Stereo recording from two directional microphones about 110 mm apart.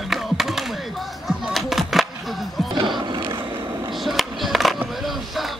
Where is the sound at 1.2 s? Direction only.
Centre (ahead or behind).